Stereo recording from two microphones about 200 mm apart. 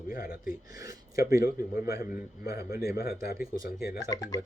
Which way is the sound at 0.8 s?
15° right (ahead or behind).